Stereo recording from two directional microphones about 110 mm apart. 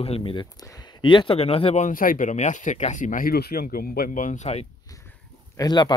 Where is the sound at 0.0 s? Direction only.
60° left (ahead or behind).